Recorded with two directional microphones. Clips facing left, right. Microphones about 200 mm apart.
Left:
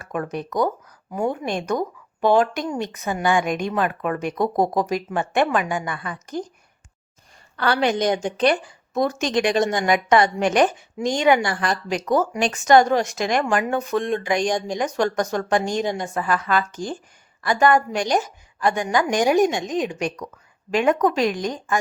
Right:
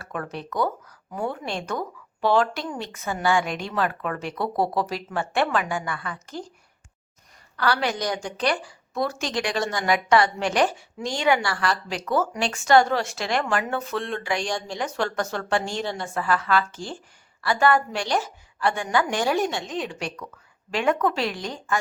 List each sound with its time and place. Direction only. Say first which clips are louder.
0.0 s speech: left 5 dB; 15° left (ahead or behind)
7.5 s a woman's voice: left 4 dB; 25° left (ahead or behind)